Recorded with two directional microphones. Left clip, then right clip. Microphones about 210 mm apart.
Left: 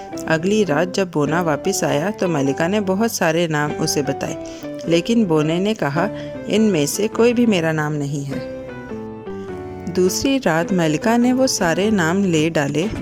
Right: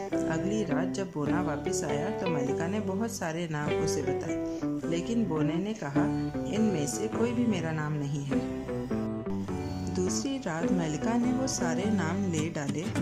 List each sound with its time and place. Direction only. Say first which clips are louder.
0.3 s speech: left 13 dB; 45° left (ahead or behind)
9.9 s speech: left 15 dB; 40° left (ahead or behind)